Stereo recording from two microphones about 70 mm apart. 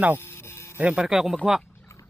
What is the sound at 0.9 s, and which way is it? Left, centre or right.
Speech, centre.